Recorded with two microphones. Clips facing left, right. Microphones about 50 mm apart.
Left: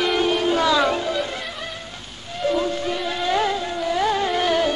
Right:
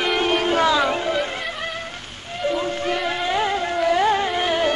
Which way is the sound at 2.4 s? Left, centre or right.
Centre.